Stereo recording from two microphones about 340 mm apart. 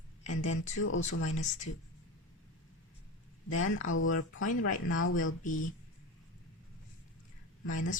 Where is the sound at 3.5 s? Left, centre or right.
Left.